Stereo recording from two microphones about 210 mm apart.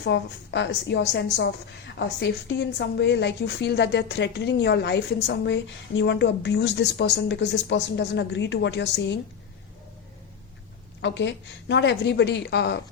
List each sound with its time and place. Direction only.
0.0 s a woman's voice: 55° left (ahead or behind)
11.0 s a woman's voice: 60° left (ahead or behind)